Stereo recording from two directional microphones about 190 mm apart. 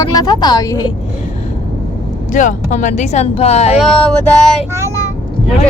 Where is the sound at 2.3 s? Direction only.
40° left (ahead or behind).